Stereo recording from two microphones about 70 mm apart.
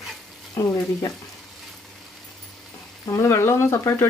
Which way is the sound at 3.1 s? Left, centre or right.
Left.